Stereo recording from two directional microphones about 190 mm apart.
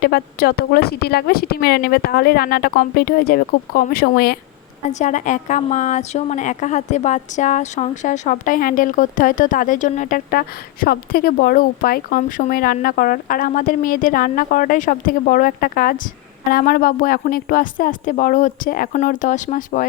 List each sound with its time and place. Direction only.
0.0 s a woman's voice: 55° left (ahead or behind)
4.9 s a woman's voice: 40° left (ahead or behind)